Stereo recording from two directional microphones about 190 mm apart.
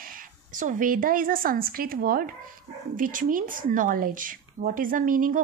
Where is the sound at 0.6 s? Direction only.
45° right (ahead or behind).